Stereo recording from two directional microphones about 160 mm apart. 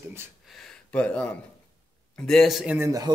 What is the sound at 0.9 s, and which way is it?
Speech, 10° left (ahead or behind).